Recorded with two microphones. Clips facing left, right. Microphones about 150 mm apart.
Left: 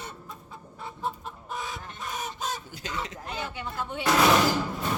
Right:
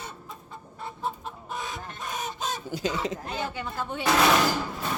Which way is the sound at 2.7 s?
35° right (ahead or behind).